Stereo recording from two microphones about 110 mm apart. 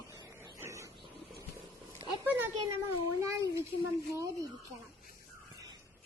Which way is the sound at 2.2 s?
20° right (ahead or behind).